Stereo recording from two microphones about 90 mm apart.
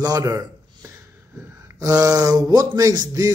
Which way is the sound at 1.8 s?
40° right (ahead or behind).